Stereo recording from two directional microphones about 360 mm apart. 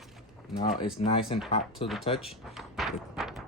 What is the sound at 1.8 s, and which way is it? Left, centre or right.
Speech, centre.